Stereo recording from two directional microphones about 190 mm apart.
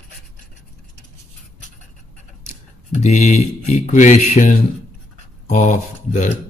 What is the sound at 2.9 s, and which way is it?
Speech, 35° left (ahead or behind).